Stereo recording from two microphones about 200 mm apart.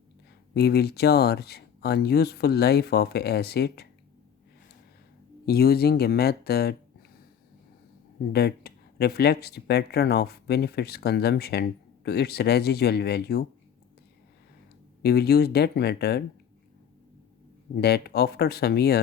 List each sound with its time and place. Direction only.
0.5 s speech: 55° left (ahead or behind)
5.5 s speech: 50° left (ahead or behind)
8.3 s speech: 55° left (ahead or behind)
15.0 s speech: 50° left (ahead or behind)
17.7 s speech: 55° left (ahead or behind)